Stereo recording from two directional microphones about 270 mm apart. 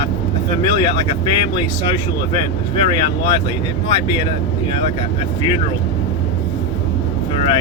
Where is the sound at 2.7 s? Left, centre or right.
Centre.